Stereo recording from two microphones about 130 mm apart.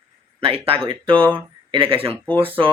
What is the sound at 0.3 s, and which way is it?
A man's voice, 45° right (ahead or behind).